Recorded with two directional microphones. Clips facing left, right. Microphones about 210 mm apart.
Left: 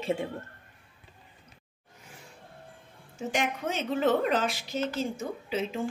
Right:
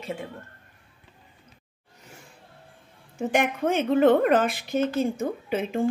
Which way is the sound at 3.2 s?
55° right (ahead or behind).